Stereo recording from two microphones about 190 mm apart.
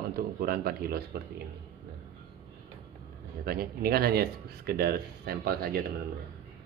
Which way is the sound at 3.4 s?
55° right (ahead or behind).